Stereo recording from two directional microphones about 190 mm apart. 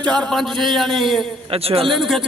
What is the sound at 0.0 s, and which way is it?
Speech, 5° left (ahead or behind).